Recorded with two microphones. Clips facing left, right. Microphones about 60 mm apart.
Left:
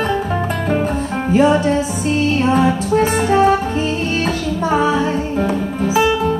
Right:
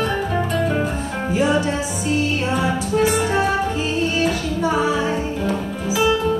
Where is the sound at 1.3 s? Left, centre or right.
Left.